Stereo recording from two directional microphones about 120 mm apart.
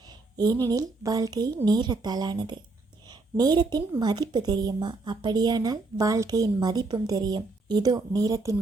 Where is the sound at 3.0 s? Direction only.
35° right (ahead or behind).